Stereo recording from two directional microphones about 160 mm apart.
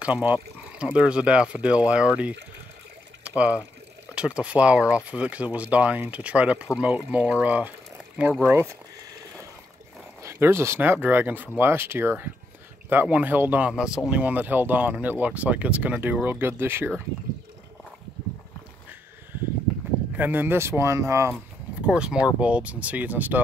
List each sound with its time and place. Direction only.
0.0 s speech: 10° right (ahead or behind)
10.2 s speech: 15° right (ahead or behind)
20.2 s speech: 10° right (ahead or behind)
21.8 s speech: 5° right (ahead or behind)